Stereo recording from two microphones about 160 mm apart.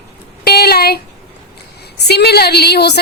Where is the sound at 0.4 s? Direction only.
80° left.